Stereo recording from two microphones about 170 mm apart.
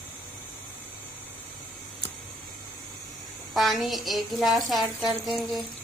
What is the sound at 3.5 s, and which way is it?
A woman's voice, centre (ahead or behind).